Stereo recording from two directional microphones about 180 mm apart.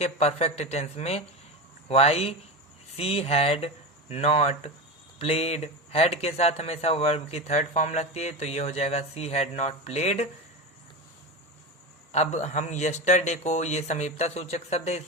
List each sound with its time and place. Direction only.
0.0 s speech: 35° left (ahead or behind)
12.1 s speech: 40° left (ahead or behind)